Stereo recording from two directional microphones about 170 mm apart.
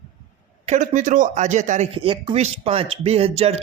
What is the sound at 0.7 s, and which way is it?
Speech, 45° right (ahead or behind).